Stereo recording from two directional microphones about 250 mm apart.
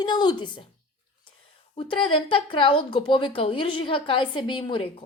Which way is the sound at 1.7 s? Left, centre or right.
Left.